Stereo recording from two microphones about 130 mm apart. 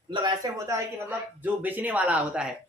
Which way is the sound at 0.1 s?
35° right (ahead or behind).